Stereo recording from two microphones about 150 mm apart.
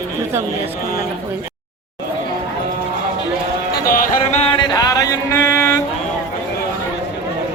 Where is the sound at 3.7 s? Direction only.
75° left (ahead or behind).